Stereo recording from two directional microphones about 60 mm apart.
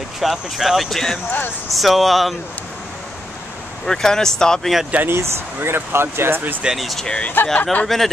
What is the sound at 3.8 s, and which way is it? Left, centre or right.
Speech, centre.